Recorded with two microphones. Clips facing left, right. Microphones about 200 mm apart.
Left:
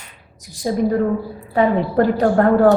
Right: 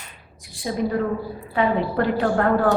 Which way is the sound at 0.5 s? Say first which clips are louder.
Left 5 dB; 40° left (ahead or behind).